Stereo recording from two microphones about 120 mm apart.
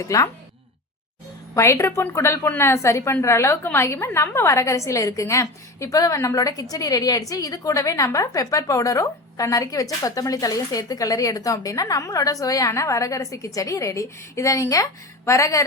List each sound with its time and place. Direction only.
0.0 s a woman's voice: 25° left (ahead or behind)
1.5 s a woman's voice: 25° left (ahead or behind)